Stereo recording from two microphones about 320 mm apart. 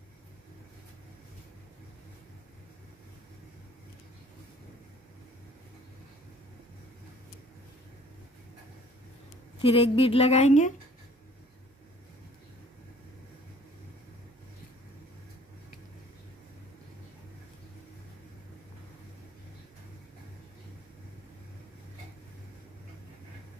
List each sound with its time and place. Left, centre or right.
9.6 s a woman's voice: centre